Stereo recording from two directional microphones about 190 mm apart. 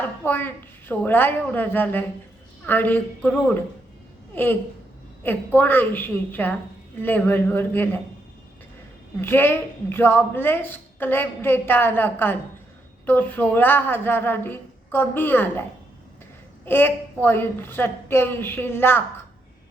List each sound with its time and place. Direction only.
0.2 s a woman's voice: 10° left (ahead or behind)
9.2 s a woman's voice: 10° left (ahead or behind)
16.6 s a woman's voice: 10° left (ahead or behind)